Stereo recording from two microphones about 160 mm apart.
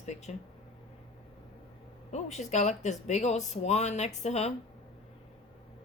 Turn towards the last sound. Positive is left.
turn(degrees=45)  # may be behind; listen again after turning